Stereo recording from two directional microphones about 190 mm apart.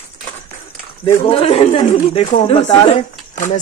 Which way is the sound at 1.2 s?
30° left (ahead or behind).